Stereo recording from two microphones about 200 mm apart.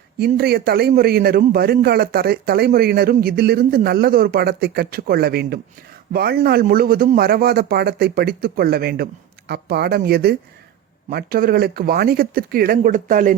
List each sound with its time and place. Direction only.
0.3 s a man's voice: 50° right (ahead or behind)